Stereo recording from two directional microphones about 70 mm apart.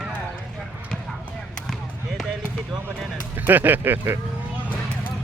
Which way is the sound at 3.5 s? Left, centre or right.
Right.